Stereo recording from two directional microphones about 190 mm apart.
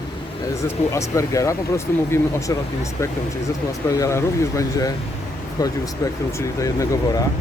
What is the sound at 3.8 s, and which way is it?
Speech, 15° left (ahead or behind).